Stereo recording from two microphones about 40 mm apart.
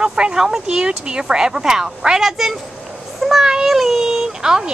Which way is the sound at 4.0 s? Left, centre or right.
Centre.